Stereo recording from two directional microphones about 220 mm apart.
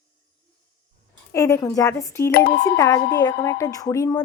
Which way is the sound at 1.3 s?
15° left (ahead or behind).